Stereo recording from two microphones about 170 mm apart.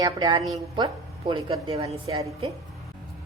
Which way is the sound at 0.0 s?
20° right (ahead or behind).